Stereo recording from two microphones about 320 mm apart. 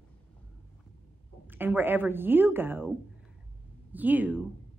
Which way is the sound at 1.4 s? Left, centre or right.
Centre.